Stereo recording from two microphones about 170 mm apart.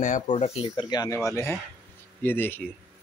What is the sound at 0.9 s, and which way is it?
Speech, 20° left (ahead or behind).